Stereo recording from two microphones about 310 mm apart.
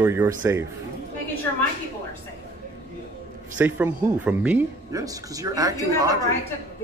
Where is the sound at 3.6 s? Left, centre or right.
Centre.